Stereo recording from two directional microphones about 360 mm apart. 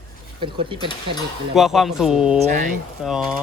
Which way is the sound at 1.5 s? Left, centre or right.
Centre.